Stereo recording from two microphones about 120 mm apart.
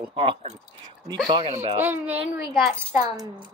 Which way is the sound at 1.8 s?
15° right (ahead or behind).